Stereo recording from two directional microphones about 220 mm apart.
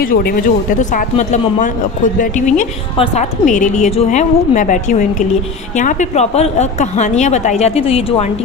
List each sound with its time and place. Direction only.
0.0 s speech: 40° left (ahead or behind); by 8.3 s 25° left (ahead or behind)